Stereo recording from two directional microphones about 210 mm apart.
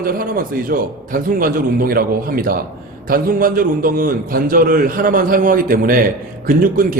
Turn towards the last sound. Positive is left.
turn(degrees=-40)  # may be behind; listen again after turning